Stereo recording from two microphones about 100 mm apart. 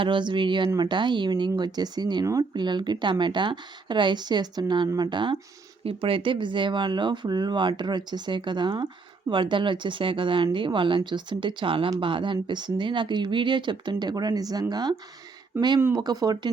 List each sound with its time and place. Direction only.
0.0 s speech: 50° right (ahead or behind)
16.0 s speech: 45° right (ahead or behind)